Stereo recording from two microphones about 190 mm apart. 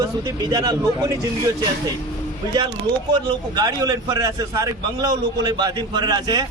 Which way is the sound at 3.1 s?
20° right (ahead or behind).